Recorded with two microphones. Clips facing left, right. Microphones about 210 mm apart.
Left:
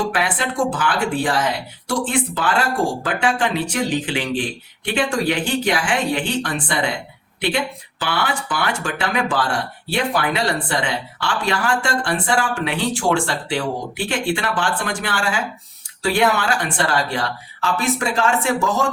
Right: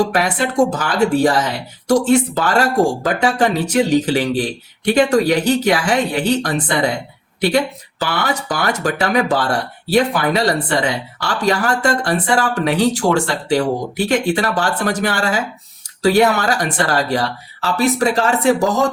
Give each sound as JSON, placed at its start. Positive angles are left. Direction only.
{"t": 0.0, "sound": "speech", "side_deg": -40}